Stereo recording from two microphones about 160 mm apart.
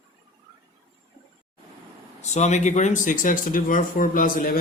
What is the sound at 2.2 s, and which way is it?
Speech, 45° left (ahead or behind).